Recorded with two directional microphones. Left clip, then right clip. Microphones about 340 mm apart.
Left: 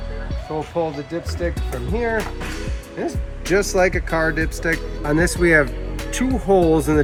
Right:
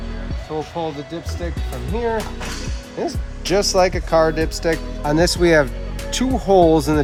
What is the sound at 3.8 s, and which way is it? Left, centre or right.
Speech, right.